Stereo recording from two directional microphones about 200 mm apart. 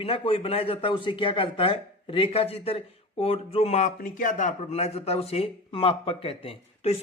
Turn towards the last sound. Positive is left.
turn(degrees=30)  # may be behind; listen again after turning